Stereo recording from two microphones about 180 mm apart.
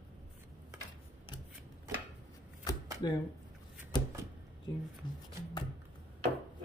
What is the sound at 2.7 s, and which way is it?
Shuffling cards, 20° left (ahead or behind).